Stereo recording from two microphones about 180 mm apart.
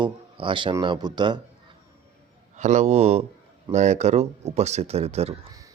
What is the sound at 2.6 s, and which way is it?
Speech, 40° right (ahead or behind).